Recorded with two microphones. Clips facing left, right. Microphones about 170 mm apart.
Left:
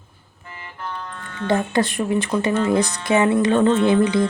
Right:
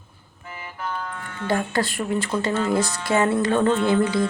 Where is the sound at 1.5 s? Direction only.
20° left (ahead or behind).